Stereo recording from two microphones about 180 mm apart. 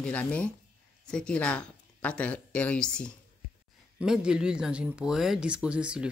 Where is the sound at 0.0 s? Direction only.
5° left (ahead or behind).